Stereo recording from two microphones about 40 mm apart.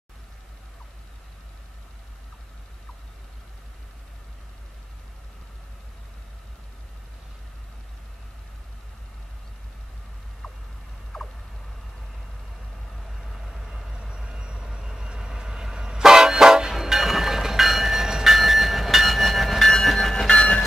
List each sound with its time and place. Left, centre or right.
10.4 s vehicle: centre
11.1 s a sound: centre
12.9 s vehicle: centre
14.0 s train: centre
14.7 s vehicle: centre
16.7 s train: centre
20.2 s a sound: left